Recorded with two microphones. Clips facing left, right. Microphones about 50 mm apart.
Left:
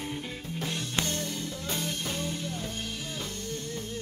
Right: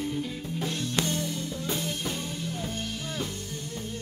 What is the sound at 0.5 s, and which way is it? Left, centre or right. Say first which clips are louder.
Music: right 2 dB; centre.